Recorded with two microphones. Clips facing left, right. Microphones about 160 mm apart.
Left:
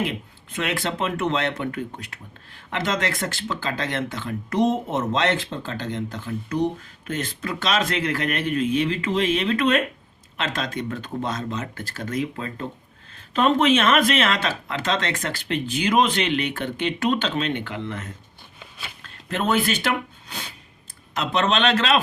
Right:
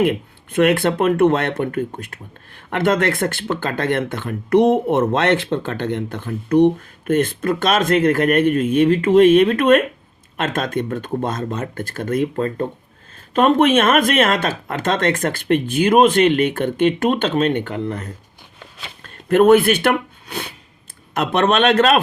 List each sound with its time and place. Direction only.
0.0 s speech: 55° right (ahead or behind); by 18.1 s 40° right (ahead or behind)
19.0 s speech: 50° right (ahead or behind)